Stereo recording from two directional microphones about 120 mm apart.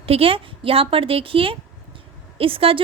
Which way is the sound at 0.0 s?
50° right (ahead or behind).